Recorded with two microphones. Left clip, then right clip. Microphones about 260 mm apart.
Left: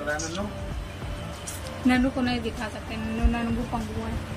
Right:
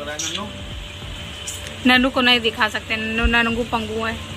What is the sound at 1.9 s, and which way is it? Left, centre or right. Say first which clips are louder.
Speech: right 10 dB; centre.